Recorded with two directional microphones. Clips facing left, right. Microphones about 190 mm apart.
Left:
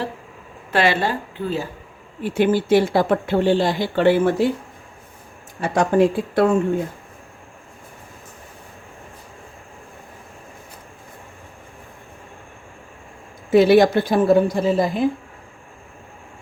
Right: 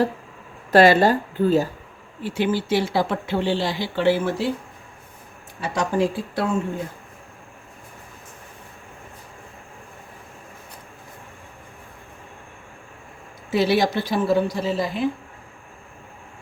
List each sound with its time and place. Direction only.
0.7 s speech: 40° right (ahead or behind)
2.2 s speech: 50° left (ahead or behind)
5.5 s speech: 50° left (ahead or behind)
13.5 s speech: 55° left (ahead or behind)